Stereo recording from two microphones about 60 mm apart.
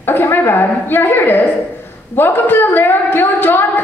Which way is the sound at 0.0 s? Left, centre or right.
Left.